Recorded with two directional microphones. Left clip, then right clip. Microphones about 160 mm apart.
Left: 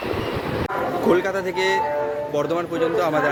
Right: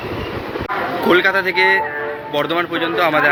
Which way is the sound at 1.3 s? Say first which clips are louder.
Right 7 dB; 20° left (ahead or behind).